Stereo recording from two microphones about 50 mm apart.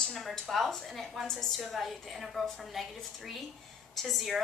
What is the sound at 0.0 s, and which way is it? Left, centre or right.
A woman's voice, centre.